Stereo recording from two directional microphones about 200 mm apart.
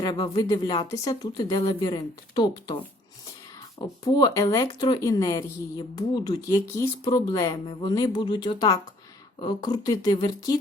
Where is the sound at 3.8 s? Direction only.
20° left (ahead or behind).